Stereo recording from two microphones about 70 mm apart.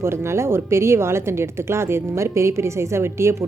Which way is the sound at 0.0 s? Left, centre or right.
Right.